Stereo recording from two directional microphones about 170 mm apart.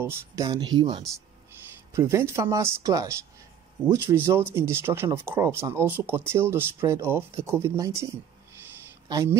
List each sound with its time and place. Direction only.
0.0 s speech: 15° right (ahead or behind)
2.0 s speech: 15° right (ahead or behind)